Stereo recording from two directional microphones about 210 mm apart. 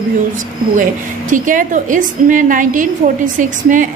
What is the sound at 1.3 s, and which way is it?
Speech, 40° right (ahead or behind).